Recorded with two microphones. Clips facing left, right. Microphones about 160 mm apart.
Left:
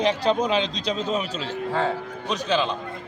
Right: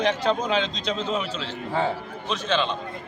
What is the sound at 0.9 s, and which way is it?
Speech, 40° left (ahead or behind).